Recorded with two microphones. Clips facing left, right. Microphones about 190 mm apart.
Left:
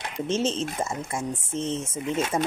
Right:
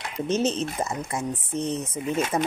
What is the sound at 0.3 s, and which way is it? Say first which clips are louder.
Speech: right 2 dB; 25° left (ahead or behind).